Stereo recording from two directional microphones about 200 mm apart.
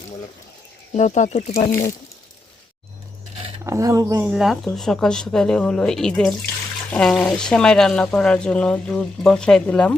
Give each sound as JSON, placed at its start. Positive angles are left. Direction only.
{"t": 0.9, "sound": "speech", "side_deg": 35}
{"t": 3.6, "sound": "speech", "side_deg": -15}
{"t": 4.3, "sound": "speech", "side_deg": 0}